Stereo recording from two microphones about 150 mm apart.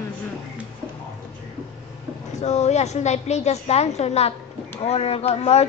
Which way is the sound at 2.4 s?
50° left (ahead or behind).